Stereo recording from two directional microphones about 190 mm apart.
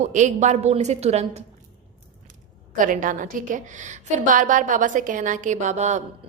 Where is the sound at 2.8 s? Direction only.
45° right (ahead or behind).